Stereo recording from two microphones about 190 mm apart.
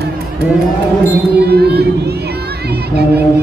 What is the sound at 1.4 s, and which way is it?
Crowd, 60° right (ahead or behind).